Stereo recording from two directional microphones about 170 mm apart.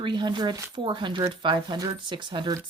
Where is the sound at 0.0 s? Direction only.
25° right (ahead or behind).